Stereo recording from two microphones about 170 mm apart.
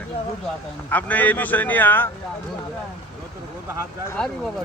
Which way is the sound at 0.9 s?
10° left (ahead or behind).